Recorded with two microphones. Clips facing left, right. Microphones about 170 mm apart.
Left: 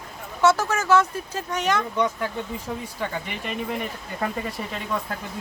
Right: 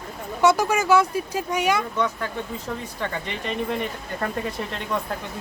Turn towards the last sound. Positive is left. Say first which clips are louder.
# right 1 dB
turn(degrees=0)  # may be behind; listen again after turning